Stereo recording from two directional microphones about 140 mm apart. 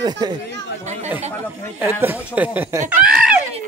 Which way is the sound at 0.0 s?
30° right (ahead or behind).